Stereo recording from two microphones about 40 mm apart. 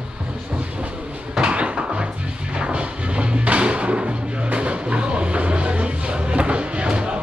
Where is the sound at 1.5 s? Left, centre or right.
Right.